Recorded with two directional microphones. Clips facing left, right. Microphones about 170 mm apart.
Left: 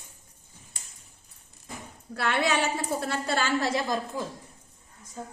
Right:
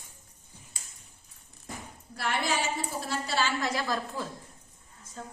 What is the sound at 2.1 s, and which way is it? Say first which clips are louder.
A woman's voice: left 4 dB; 65° left (ahead or behind).